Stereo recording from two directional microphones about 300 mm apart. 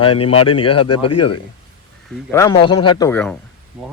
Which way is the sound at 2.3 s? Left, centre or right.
Centre.